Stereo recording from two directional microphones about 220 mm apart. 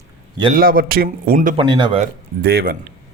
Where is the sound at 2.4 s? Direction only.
45° right (ahead or behind).